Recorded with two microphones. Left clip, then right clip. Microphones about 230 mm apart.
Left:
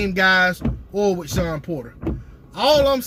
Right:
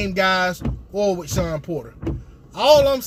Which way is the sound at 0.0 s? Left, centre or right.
Centre.